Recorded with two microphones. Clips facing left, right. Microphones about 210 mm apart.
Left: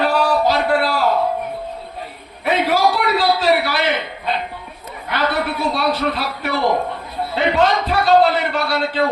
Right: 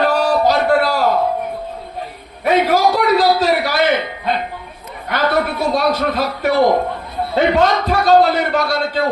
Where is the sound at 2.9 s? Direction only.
40° right (ahead or behind).